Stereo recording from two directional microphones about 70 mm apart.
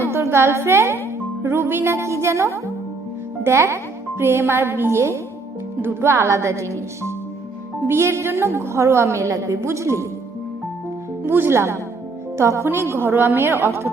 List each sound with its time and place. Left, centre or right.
0.0 s a woman's voice: right
11.3 s a woman's voice: right